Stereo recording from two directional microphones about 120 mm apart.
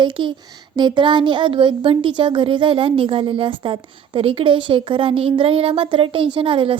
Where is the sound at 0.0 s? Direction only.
40° right (ahead or behind).